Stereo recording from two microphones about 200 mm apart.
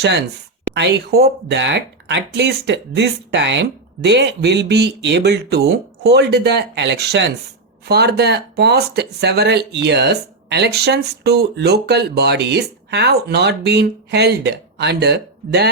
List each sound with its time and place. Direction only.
0.7 s speech: 60° right (ahead or behind)